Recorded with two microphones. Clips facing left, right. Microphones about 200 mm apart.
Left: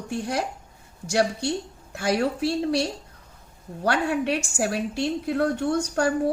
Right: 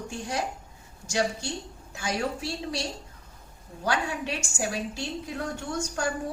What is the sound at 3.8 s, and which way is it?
A woman's voice, 60° left (ahead or behind).